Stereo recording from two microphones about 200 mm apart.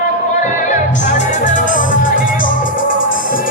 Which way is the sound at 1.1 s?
40° left (ahead or behind).